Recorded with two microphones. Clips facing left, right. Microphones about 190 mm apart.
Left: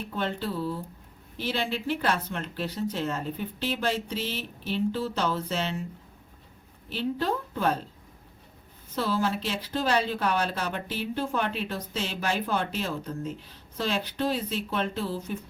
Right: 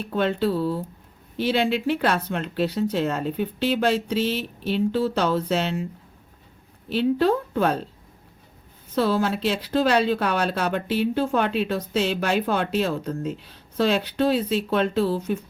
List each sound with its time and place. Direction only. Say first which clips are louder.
0.1 s a woman's voice: right 9 dB; 70° right (ahead or behind)
6.9 s a woman's voice: right 8 dB; 70° right (ahead or behind)
9.0 s a woman's voice: right 6 dB; 70° right (ahead or behind)